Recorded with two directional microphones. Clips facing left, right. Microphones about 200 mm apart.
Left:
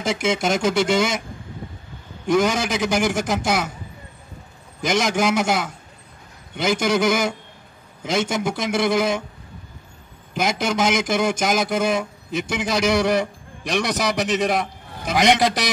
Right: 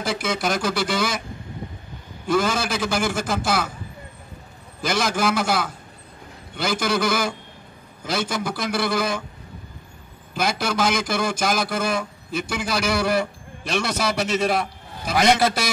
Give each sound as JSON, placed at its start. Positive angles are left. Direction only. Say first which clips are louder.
{"t": 0.0, "sound": "a man's voice", "louder": "left 3 dB", "side_deg": 20}
{"t": 2.2, "sound": "a man's voice", "louder": "left 3 dB", "side_deg": 20}
{"t": 4.8, "sound": "a man's voice", "louder": "left 2 dB", "side_deg": 20}
{"t": 10.3, "sound": "a man's voice", "louder": "left 2 dB", "side_deg": 20}